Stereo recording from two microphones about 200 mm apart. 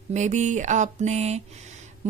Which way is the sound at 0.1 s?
35° right (ahead or behind).